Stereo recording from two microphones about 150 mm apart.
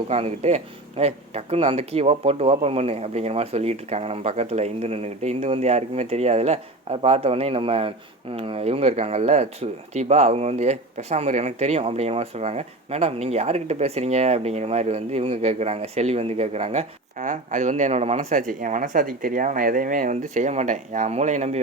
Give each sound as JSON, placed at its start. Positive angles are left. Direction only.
{"t": 0.1, "sound": "speech", "side_deg": -45}